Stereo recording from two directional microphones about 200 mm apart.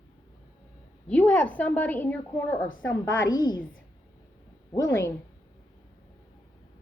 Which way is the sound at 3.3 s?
20° left (ahead or behind).